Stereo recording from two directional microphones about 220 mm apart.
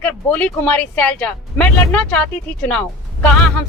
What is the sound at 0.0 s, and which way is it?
Speech, 5° left (ahead or behind).